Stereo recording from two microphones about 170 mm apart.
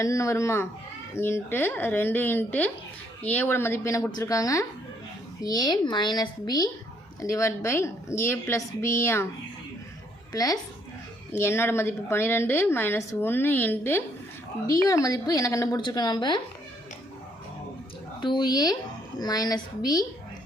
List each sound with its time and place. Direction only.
0.0 s a woman's voice: 20° left (ahead or behind)
10.3 s a woman's voice: 20° left (ahead or behind)
18.2 s a woman's voice: 25° left (ahead or behind)